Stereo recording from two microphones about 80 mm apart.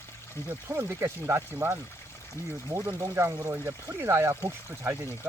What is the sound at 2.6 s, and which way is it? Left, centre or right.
Speech, right.